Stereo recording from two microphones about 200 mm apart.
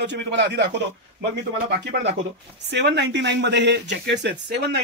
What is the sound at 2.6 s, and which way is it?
Speech, 60° right (ahead or behind).